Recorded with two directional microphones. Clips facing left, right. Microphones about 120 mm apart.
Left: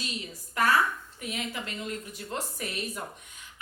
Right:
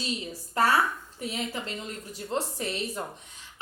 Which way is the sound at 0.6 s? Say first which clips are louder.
Right 1 dB; 30° right (ahead or behind).